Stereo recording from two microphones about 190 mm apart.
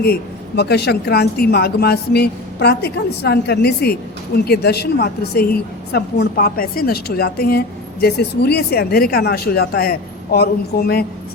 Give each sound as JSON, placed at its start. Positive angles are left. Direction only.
{"t": 0.0, "sound": "a woman's voice", "side_deg": 60}